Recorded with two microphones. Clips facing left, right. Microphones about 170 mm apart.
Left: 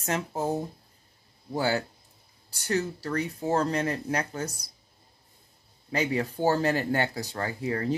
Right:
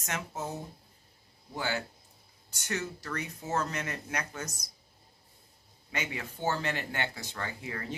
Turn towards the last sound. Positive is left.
turn(degrees=35)  # may be behind; listen again after turning